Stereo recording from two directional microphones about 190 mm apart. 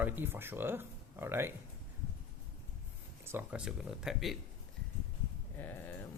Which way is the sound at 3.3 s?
10° right (ahead or behind).